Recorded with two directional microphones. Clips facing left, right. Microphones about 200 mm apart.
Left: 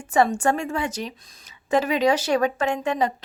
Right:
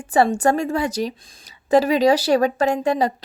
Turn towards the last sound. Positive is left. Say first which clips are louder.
# right 4 dB
turn(degrees=-35)  # may be behind; listen again after turning